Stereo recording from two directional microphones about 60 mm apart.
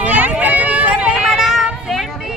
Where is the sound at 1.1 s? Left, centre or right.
Centre.